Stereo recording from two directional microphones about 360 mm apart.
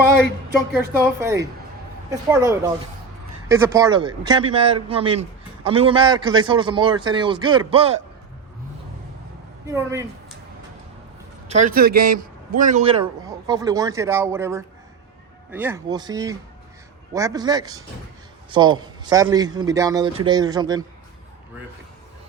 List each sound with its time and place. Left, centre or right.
1.2 s a man's voice: centre
9.7 s a man's voice: centre
11.4 s a man's voice: centre